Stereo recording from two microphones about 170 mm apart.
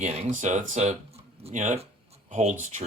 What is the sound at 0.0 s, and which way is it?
Speech, 40° right (ahead or behind).